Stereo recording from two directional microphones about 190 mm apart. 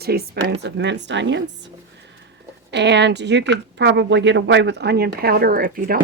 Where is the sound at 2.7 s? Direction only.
65° right (ahead or behind); by 6.0 s 50° right (ahead or behind).